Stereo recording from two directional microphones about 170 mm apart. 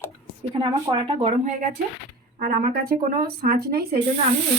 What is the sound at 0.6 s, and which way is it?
Speech, 30° right (ahead or behind).